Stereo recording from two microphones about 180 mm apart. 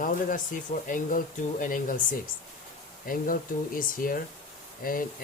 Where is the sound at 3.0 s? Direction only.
50° left (ahead or behind).